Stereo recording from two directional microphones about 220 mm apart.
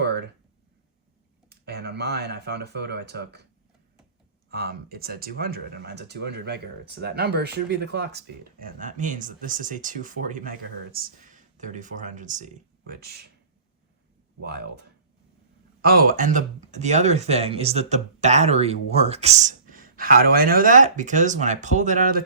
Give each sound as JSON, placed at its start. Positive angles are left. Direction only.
{"t": 1.5, "sound": "speech", "side_deg": -50}
{"t": 4.4, "sound": "speech", "side_deg": -45}
{"t": 8.6, "sound": "speech", "side_deg": -35}
{"t": 12.9, "sound": "speech", "side_deg": -45}
{"t": 14.4, "sound": "speech", "side_deg": -45}
{"t": 15.8, "sound": "speech", "side_deg": -45}